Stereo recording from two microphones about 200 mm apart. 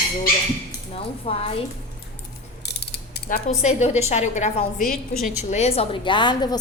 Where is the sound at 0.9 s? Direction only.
30° left (ahead or behind).